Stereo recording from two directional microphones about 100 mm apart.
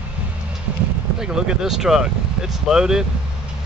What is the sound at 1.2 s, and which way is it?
Speech, 5° right (ahead or behind).